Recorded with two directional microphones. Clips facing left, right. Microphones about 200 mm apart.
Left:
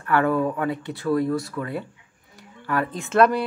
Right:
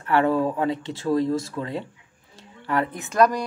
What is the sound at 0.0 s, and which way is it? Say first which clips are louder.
Speech: even; 20° right (ahead or behind).